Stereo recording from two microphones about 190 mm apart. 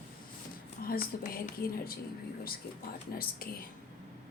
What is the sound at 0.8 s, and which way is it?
Speech, 50° left (ahead or behind).